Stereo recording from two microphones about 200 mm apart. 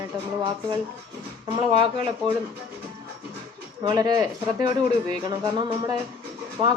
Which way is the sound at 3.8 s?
20° right (ahead or behind).